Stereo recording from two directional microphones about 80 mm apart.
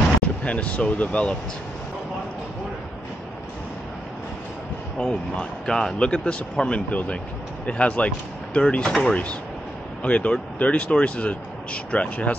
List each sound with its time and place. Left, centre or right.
0.2 s speech: centre
4.9 s speech: centre